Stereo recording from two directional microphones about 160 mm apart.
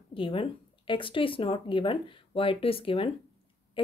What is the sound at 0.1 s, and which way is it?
A woman's voice, 35° left (ahead or behind).